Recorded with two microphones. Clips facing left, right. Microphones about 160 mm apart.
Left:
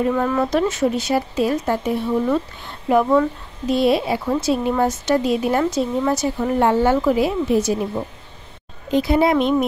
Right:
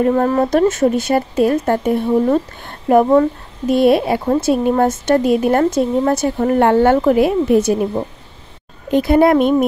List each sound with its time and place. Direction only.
0.0 s a woman's voice: 40° right (ahead or behind)
8.9 s speech: 55° right (ahead or behind)